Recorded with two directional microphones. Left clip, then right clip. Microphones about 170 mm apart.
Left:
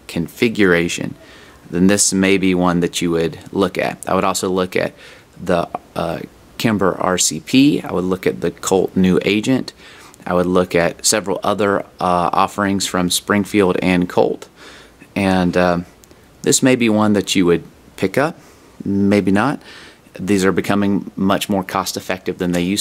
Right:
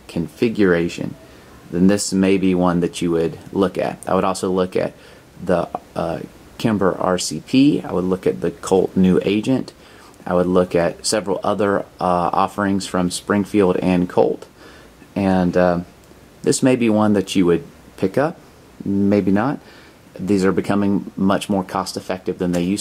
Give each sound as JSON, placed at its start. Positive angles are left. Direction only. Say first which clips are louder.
{"t": 0.0, "sound": "speech", "louder": "left 2 dB", "side_deg": 15}